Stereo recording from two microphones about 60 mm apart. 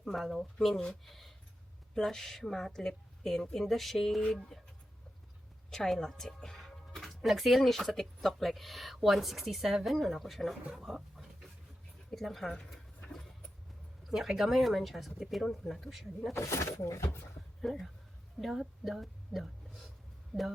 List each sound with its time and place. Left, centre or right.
0.0 s speech: centre
5.7 s speech: centre
10.7 s a sound: centre
14.1 s speech: centre
16.3 s speech: left
17.6 s a woman's voice: centre